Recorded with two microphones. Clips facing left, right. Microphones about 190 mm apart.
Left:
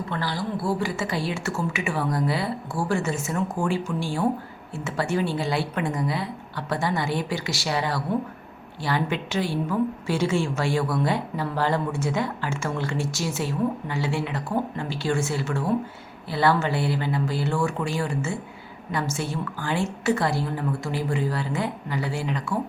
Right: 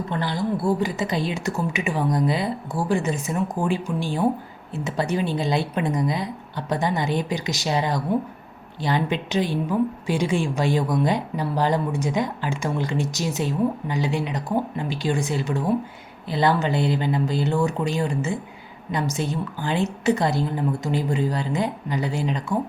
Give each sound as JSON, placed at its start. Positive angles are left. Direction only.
{"t": 0.1, "sound": "a woman's voice", "side_deg": -20}